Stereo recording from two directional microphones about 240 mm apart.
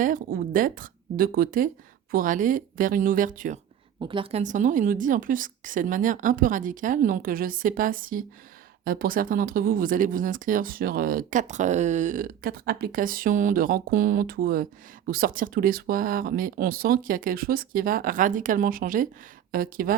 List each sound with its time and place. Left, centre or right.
0.0 s speech: right
4.0 s speech: right